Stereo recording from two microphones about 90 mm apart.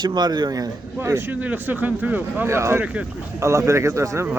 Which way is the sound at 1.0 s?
25° right (ahead or behind).